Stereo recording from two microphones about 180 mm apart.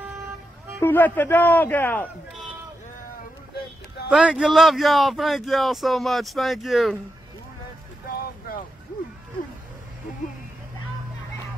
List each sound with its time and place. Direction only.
0.7 s a man's voice: 10° left (ahead or behind)
4.1 s speech: 5° right (ahead or behind)
8.2 s boat: 55° left (ahead or behind)